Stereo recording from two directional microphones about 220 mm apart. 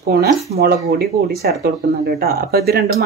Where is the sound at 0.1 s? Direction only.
45° right (ahead or behind).